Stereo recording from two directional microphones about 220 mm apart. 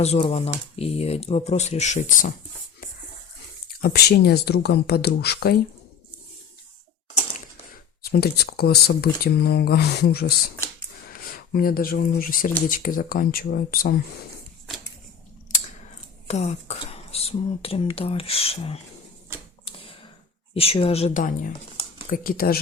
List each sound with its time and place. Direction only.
0.0 s speech: 30° left (ahead or behind)
3.8 s speech: 45° left (ahead or behind)
8.0 s speech: 45° left (ahead or behind)
15.5 s a sound: 35° left (ahead or behind)
16.2 s speech: 30° left (ahead or behind)
19.3 s typewriter: 10° right (ahead or behind)
19.6 s a sound: 25° left (ahead or behind)
20.5 s speech: 25° left (ahead or behind); by 22.5 s 40° left (ahead or behind)